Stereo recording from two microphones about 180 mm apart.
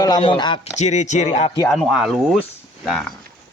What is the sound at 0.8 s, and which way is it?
Speech, 40° left (ahead or behind).